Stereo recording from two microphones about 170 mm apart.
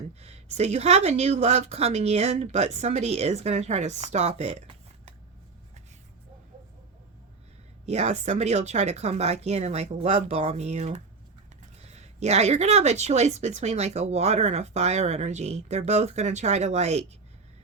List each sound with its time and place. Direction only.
0.2 s speech: 40° right (ahead or behind)
7.9 s speech: 40° right (ahead or behind)